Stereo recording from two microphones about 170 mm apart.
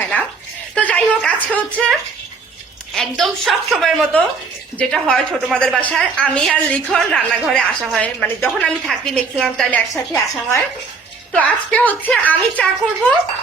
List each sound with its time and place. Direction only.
0.0 s toothbrush: 10° left (ahead or behind)
0.8 s a woman's voice: 10° left (ahead or behind)
9.9 s a woman's voice: 15° left (ahead or behind)